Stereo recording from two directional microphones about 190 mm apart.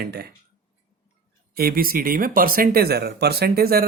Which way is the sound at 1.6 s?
50° right (ahead or behind).